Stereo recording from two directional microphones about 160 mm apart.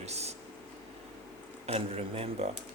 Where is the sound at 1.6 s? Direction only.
40° right (ahead or behind).